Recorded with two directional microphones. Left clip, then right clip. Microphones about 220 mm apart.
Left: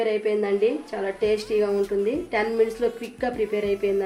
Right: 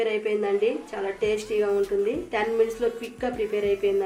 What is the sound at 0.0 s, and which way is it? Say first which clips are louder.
A woman's voice: left 2 dB; 20° left (ahead or behind).